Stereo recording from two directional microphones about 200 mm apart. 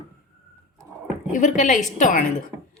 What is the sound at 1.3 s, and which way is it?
Speech, 40° left (ahead or behind).